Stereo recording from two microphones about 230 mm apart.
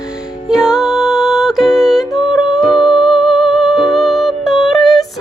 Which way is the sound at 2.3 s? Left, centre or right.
Centre.